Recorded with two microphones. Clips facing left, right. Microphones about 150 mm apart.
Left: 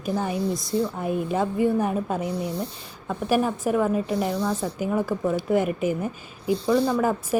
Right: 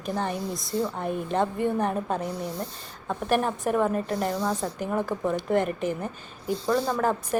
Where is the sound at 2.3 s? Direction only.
65° left (ahead or behind).